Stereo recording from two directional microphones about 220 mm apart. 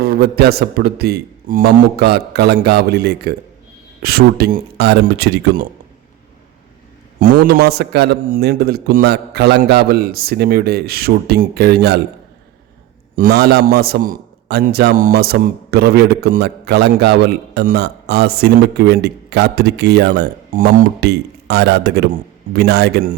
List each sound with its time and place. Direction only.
0.0 s a man's voice: 45° right (ahead or behind)
7.2 s a man's voice: 40° right (ahead or behind)
13.1 s a man's voice: 45° right (ahead or behind)